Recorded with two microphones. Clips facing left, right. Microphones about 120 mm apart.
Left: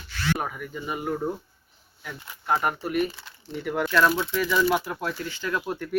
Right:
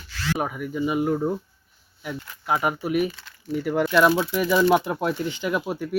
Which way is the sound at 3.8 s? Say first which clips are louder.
Right 3 dB; 15° right (ahead or behind).